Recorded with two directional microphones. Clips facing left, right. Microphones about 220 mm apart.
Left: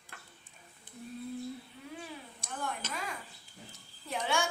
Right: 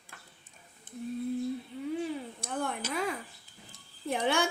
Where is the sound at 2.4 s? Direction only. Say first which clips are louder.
Right 2 dB; 55° right (ahead or behind).